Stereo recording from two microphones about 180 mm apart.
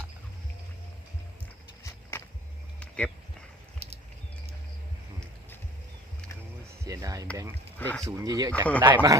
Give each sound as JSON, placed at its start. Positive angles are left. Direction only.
{"t": 1.8, "sound": "walk", "side_deg": 15}
{"t": 2.8, "sound": "a sound", "side_deg": 5}
{"t": 6.8, "sound": "speech", "side_deg": -20}
{"t": 7.8, "sound": "speech", "side_deg": 10}
{"t": 8.0, "sound": "speech", "side_deg": -20}